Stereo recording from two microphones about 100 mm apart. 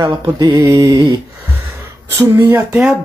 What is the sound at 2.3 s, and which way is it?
Speech, 20° right (ahead or behind).